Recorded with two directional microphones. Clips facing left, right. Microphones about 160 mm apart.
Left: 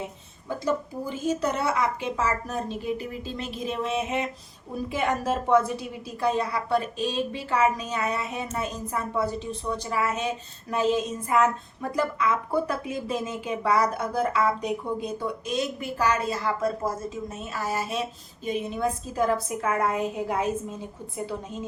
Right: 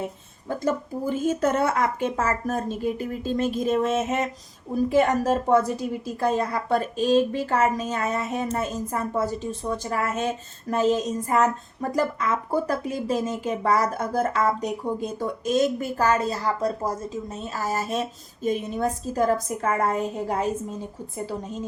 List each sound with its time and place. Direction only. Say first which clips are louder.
1.1 s a woman's voice: right 4 dB; 50° right (ahead or behind)